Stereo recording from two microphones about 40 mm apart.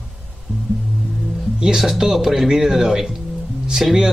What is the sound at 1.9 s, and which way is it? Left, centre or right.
Speech, centre.